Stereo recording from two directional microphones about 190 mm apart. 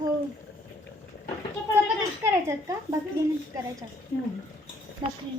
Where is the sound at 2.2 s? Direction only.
15° right (ahead or behind).